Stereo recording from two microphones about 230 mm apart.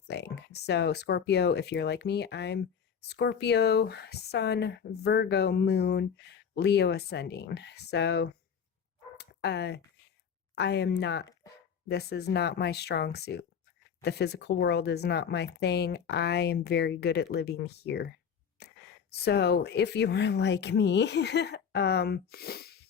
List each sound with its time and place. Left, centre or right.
0.1 s speech: left
9.1 s bow-wow: left
10.5 s speech: left